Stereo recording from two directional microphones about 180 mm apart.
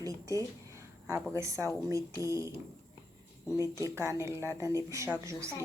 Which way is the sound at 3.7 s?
15° right (ahead or behind).